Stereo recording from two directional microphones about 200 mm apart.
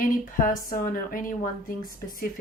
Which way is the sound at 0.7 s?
45° left (ahead or behind).